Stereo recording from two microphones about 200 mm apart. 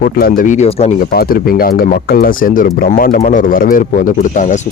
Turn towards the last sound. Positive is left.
turn(degrees=40)  # may be behind; listen again after turning